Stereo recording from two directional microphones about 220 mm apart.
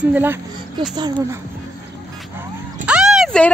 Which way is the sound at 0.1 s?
10° right (ahead or behind).